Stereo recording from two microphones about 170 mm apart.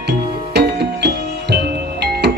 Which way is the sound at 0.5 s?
75° right (ahead or behind).